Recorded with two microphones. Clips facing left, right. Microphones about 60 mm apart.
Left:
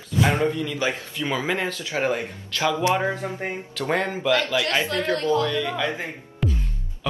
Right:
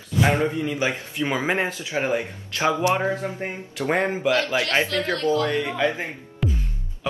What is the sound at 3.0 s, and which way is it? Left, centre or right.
Speech, left.